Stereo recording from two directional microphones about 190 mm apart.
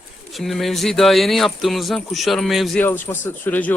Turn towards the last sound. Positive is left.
turn(degrees=10)  # may be behind; listen again after turning